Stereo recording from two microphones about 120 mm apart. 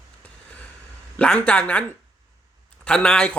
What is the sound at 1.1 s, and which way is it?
Speech, 10° left (ahead or behind).